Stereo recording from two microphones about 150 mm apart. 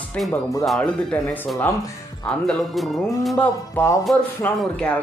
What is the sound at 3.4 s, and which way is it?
Speech, 15° left (ahead or behind).